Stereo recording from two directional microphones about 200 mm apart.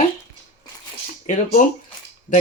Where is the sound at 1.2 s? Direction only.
40° left (ahead or behind).